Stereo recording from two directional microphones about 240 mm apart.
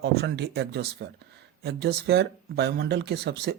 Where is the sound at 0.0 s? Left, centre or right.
Right.